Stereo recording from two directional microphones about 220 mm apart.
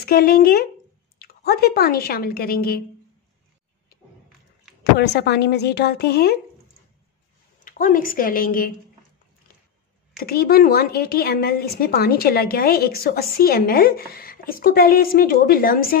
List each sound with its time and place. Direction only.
0.0 s a woman's voice: 45° left (ahead or behind)
4.9 s a woman's voice: 50° left (ahead or behind)
7.6 s speech: 40° left (ahead or behind)
10.1 s a woman's voice: 45° left (ahead or behind)